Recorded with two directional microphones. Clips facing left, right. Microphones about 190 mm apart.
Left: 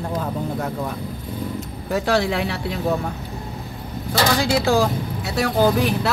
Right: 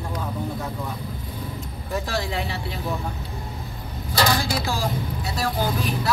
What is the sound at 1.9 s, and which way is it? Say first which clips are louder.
Speech: left 7 dB; 75° left (ahead or behind).